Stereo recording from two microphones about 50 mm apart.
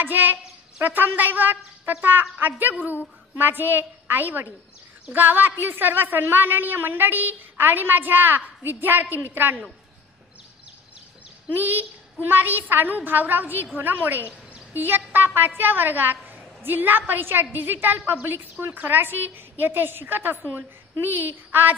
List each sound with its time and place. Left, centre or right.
0.0 s a woman's voice: right
11.5 s a woman's voice: right